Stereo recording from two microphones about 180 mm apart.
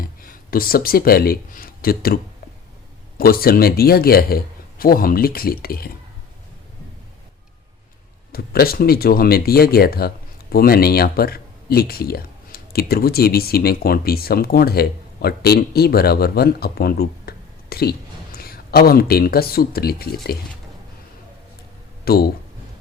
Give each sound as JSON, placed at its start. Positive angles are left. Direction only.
{"t": 0.0, "sound": "speech", "side_deg": 55}
{"t": 3.2, "sound": "speech", "side_deg": 55}
{"t": 8.3, "sound": "speech", "side_deg": 55}
{"t": 22.0, "sound": "speech", "side_deg": 60}